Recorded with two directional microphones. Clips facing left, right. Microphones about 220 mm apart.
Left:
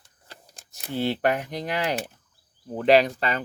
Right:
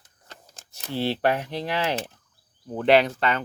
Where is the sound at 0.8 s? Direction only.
15° left (ahead or behind).